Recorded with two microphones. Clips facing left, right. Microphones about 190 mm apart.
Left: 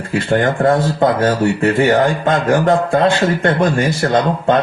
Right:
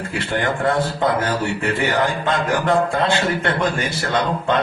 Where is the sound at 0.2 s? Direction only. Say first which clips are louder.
Left 7 dB; 40° left (ahead or behind).